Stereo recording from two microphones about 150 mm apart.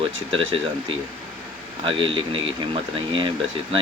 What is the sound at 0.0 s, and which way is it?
Speech, 35° right (ahead or behind).